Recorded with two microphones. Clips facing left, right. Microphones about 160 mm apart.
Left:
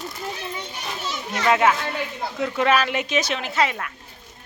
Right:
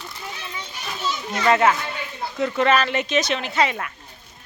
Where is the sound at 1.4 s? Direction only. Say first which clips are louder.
Right 1 dB; 5° left (ahead or behind).